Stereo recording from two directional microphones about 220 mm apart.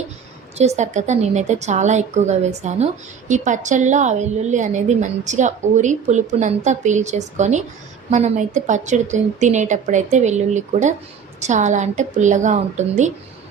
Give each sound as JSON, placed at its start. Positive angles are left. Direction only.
{"t": 0.8, "sound": "a woman's voice", "side_deg": -30}